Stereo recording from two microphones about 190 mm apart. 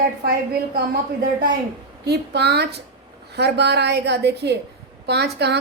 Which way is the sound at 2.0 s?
60° right (ahead or behind).